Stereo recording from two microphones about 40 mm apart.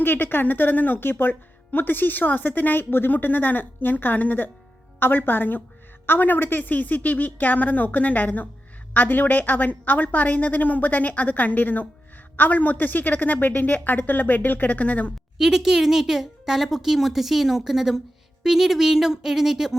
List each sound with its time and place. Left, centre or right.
0.0 s a woman's voice: left
4.9 s a woman's voice: left
14.8 s a woman's voice: left
15.4 s speech: centre